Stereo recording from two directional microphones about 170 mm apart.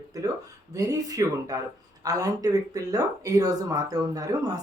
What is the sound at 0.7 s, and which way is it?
Speech, 20° right (ahead or behind).